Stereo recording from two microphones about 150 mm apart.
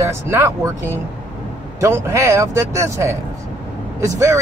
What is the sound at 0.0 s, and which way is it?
Speech, 20° right (ahead or behind).